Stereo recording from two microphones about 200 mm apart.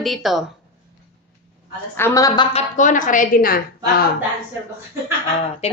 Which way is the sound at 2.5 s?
40° left (ahead or behind).